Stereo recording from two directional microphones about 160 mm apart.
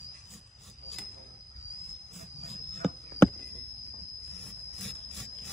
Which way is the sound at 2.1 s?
Centre (ahead or behind).